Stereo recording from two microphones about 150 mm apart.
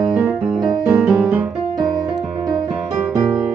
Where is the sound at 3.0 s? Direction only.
5° right (ahead or behind).